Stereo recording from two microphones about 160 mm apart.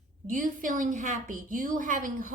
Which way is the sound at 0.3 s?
55° right (ahead or behind).